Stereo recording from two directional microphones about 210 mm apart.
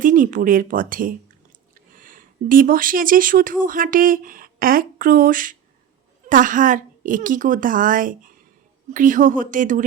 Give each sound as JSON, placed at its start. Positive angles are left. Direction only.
{"t": 0.0, "sound": "a woman's voice", "side_deg": -40}